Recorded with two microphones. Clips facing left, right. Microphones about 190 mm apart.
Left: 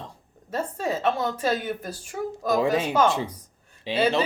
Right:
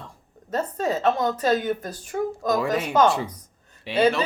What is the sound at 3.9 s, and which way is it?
Speech, 20° left (ahead or behind).